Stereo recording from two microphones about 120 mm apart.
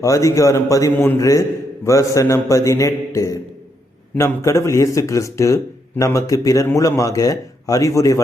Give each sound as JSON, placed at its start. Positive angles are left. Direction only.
{"t": 0.0, "sound": "a man's voice", "side_deg": 25}